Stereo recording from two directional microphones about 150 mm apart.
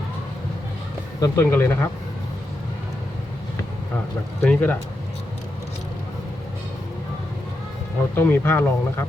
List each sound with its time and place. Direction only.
1.2 s speech: 15° left (ahead or behind)
4.4 s speech: 10° left (ahead or behind)
8.1 s speech: 15° left (ahead or behind)